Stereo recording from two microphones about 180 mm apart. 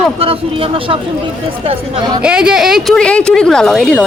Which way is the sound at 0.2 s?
30° right (ahead or behind).